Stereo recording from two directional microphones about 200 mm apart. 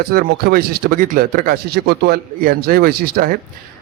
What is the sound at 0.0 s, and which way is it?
A man's voice, 50° right (ahead or behind).